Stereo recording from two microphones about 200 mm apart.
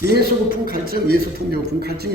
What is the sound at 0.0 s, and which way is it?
A man's voice, 55° right (ahead or behind).